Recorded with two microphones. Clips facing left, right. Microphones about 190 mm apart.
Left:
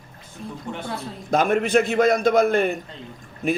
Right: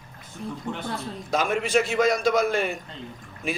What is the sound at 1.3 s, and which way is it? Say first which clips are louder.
A man's voice: left 4 dB; 55° left (ahead or behind).